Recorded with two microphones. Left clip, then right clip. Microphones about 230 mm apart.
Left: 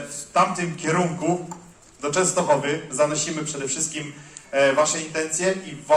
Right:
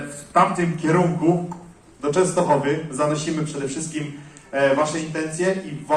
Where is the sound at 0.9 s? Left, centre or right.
Left.